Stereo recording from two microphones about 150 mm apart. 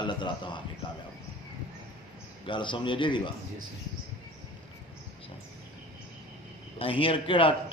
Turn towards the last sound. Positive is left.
turn(degrees=35)  # may be behind; listen again after turning